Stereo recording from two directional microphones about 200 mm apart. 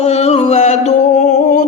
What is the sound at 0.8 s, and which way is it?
Music, 35° left (ahead or behind).